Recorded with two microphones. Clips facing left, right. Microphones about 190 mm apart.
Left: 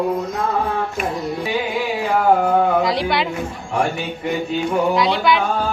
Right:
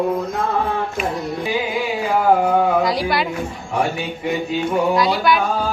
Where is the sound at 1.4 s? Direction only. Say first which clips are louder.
Right 1 dB; centre (ahead or behind).